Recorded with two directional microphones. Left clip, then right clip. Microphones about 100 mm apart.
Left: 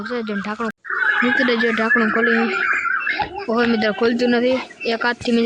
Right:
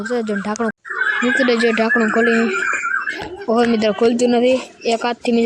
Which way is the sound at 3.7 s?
35° right (ahead or behind).